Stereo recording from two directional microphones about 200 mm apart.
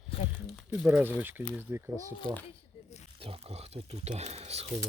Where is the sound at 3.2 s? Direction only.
30° right (ahead or behind).